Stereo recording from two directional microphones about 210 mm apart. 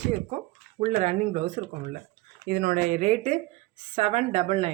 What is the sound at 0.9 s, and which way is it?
Speech, 35° right (ahead or behind).